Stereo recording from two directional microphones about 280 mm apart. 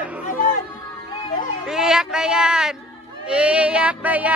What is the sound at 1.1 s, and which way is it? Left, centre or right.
Music, centre.